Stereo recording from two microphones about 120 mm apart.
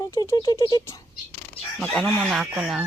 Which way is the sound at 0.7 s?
30° left (ahead or behind).